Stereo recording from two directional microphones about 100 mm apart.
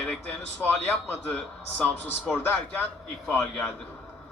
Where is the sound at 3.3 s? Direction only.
10° left (ahead or behind).